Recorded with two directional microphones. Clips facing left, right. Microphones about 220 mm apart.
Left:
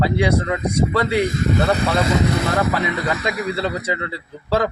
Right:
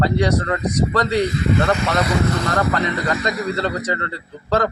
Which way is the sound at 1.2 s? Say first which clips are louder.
Even; 45° left (ahead or behind).